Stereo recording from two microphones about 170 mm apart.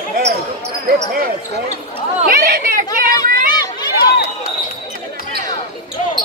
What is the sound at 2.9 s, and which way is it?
Children playing, 60° right (ahead or behind).